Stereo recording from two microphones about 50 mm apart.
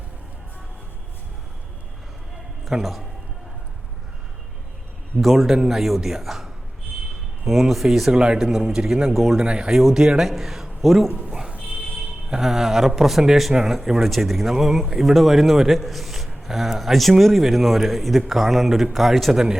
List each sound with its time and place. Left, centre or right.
2.8 s speech: centre
5.2 s speech: centre
8.1 s a man's voice: centre
11.3 s music: right
12.3 s speech: centre